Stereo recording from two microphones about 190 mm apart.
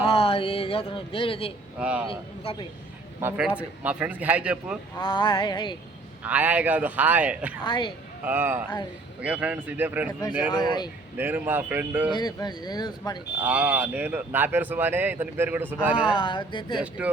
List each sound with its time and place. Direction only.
0.1 s a sound: 30° left (ahead or behind)
1.8 s speech: 5° right (ahead or behind)
2.4 s speech: 30° left (ahead or behind)
3.2 s speech: 10° right (ahead or behind)
4.9 s speech: 25° left (ahead or behind)
6.2 s speech: 10° right (ahead or behind)
7.6 s speech: 25° left (ahead or behind)
8.2 s speech: 10° right (ahead or behind)
10.1 s speech: 20° left (ahead or behind)
11.2 s speech: 10° right (ahead or behind)
12.1 s speech: 20° left (ahead or behind)
13.4 s speech: 5° right (ahead or behind)
16.1 s speech: 25° left (ahead or behind)